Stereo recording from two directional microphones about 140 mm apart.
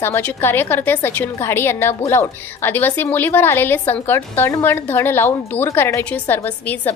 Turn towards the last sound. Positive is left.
turn(degrees=15)  # may be behind; listen again after turning